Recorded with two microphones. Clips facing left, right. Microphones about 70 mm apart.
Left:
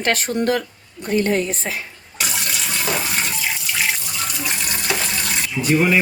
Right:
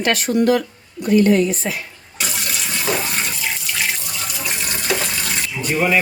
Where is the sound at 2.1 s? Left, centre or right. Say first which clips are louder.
Even; centre.